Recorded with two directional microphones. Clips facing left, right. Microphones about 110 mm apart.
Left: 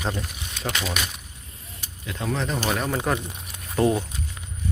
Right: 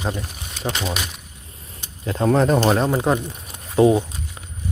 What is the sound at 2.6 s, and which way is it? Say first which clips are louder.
Speech: right 7 dB; 30° right (ahead or behind).